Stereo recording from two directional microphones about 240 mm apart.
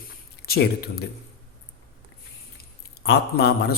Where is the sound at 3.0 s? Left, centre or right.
Left.